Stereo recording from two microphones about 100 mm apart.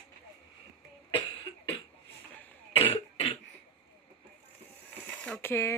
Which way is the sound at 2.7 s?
85° left.